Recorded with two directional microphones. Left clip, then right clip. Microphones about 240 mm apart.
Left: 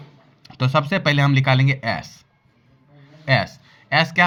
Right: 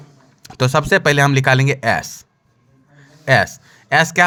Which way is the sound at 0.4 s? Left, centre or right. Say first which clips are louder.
Right 4 dB; right.